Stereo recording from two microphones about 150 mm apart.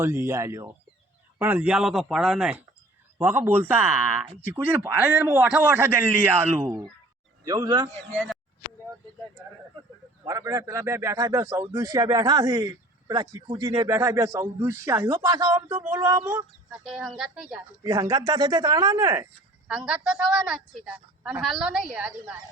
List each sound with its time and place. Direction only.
0.0 s a man's voice: 15° right (ahead or behind)
3.2 s a man's voice: 15° right (ahead or behind)
8.1 s speech: 5° left (ahead or behind)
10.2 s a man's voice: 20° right (ahead or behind)
16.8 s a woman's voice: centre (ahead or behind)
17.8 s a man's voice: 20° right (ahead or behind)
19.6 s a woman's voice: 5° right (ahead or behind)